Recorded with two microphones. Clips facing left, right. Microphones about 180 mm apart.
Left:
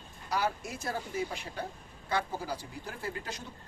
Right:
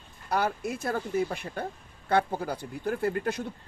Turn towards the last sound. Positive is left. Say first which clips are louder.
# right 11 dB
turn(degrees=-55)  # may be behind; listen again after turning